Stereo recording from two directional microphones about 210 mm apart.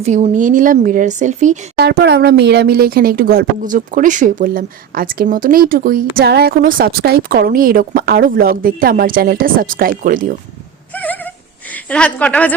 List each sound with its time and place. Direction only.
0.0 s speech: 35° right (ahead or behind)
1.8 s speech: 50° right (ahead or behind)
10.9 s dog: 10° left (ahead or behind)
11.7 s a woman's voice: 5° left (ahead or behind)